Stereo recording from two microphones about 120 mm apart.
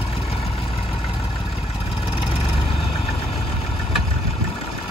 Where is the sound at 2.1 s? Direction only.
55° left (ahead or behind).